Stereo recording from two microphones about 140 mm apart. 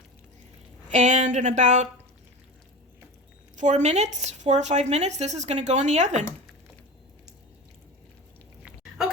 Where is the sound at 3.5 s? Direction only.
60° right (ahead or behind).